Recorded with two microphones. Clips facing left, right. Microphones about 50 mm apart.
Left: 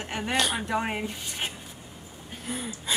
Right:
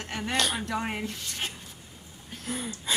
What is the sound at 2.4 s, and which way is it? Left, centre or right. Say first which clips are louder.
Speech: even; centre.